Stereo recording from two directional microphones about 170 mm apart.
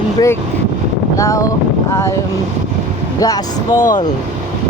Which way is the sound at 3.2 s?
20° left (ahead or behind).